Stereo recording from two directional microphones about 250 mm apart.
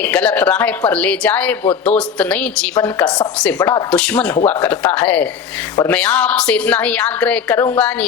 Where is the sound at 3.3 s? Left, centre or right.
Centre.